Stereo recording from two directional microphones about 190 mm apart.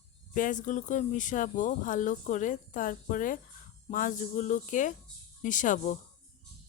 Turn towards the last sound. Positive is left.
turn(degrees=40)  # may be behind; listen again after turning